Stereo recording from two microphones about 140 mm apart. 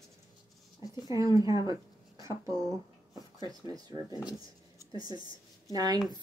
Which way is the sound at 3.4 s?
30° right (ahead or behind).